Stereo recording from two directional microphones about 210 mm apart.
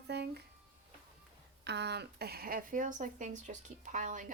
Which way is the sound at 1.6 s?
55° right (ahead or behind).